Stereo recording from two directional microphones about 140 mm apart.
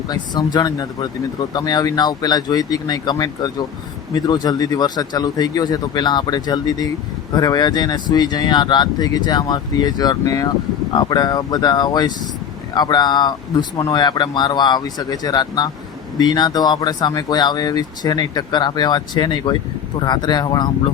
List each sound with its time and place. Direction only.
0.1 s speech: 30° left (ahead or behind)